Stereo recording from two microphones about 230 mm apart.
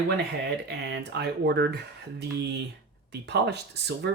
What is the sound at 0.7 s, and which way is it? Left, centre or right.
Speech, right.